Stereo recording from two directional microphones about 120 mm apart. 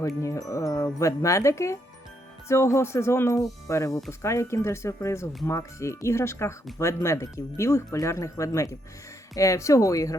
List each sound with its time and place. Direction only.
0.2 s speech: 25° left (ahead or behind)